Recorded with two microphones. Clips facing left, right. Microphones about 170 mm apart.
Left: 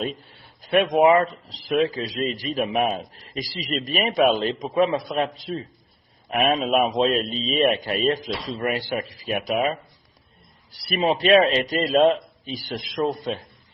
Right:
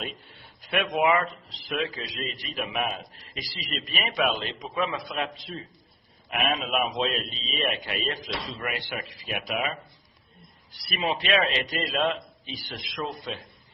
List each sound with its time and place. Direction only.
0.3 s a man's voice: 35° left (ahead or behind)